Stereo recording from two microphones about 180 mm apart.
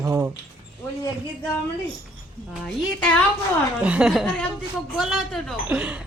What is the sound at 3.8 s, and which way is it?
Speech, 5° right (ahead or behind).